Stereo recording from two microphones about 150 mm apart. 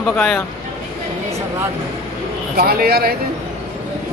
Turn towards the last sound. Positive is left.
turn(degrees=-90)